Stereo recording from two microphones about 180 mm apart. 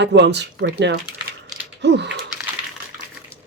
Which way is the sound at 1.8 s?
70° right (ahead or behind).